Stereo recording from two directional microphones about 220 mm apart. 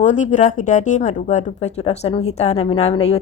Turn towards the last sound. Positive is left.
turn(degrees=30)  # may be behind; listen again after turning